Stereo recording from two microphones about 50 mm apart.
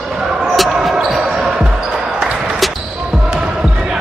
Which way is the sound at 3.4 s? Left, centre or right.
Centre.